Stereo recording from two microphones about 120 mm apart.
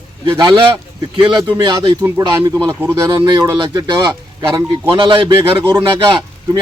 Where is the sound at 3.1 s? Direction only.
35° right (ahead or behind).